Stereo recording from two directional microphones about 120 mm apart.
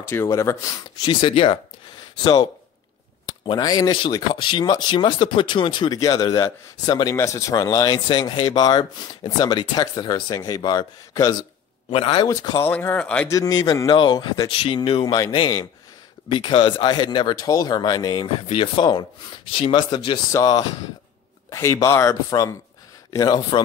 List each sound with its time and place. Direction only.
0.0 s speech: 20° left (ahead or behind)
1.0 s speech: 45° left (ahead or behind)
3.3 s speech: 35° left (ahead or behind)
11.9 s speech: 45° left (ahead or behind)
12.6 s speech: 15° left (ahead or behind)
13.3 s speech: 30° left (ahead or behind)
20.2 s speech: 30° left (ahead or behind)